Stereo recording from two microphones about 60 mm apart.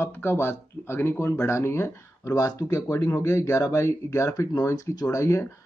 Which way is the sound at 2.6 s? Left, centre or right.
Left.